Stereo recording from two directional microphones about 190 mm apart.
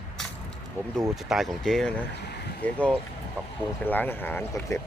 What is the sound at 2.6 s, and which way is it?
Speech, 5° left (ahead or behind).